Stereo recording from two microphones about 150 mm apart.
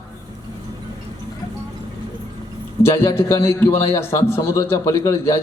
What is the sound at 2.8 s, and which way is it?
A man's voice, 15° left (ahead or behind).